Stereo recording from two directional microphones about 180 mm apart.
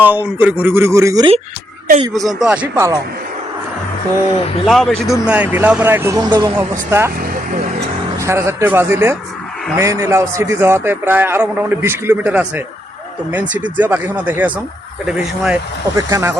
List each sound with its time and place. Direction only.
0.0 s a man's voice: 10° right (ahead or behind)
2.1 s a man's voice: centre (ahead or behind)
4.6 s a man's voice: centre (ahead or behind); by 6.5 s 25° right (ahead or behind)
6.6 s a man's voice: 15° right (ahead or behind)
8.2 s a man's voice: 15° right (ahead or behind)
16.0 s a man's voice: 15° right (ahead or behind)